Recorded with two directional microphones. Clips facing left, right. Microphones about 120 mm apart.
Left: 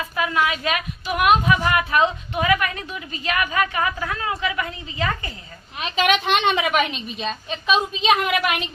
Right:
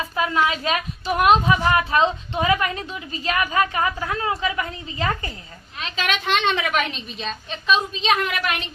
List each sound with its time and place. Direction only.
0.0 s a sound: 30° right (ahead or behind)
0.4 s a woman's voice: 30° right (ahead or behind)
5.8 s a woman's voice: 15° left (ahead or behind)